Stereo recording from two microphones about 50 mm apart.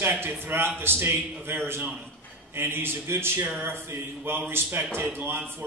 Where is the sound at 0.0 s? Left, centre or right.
Right.